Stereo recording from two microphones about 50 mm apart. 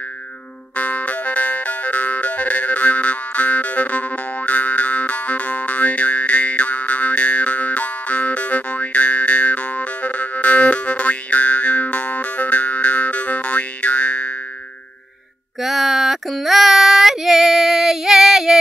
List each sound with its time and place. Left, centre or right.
0.7 s music: left
15.6 s female singing: centre